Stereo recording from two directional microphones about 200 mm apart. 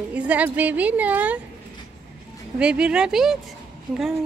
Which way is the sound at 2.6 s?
5° right (ahead or behind).